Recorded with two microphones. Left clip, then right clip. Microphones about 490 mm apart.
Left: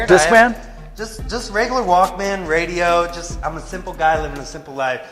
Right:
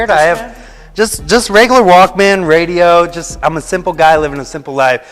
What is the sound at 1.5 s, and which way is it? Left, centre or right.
A man's voice, right.